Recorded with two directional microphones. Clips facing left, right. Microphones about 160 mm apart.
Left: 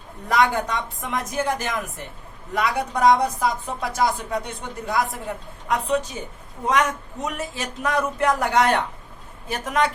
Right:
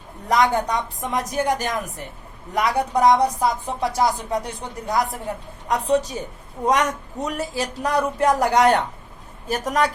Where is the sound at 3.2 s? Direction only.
35° right (ahead or behind).